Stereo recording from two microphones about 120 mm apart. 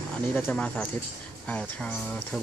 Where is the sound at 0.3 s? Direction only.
15° left (ahead or behind).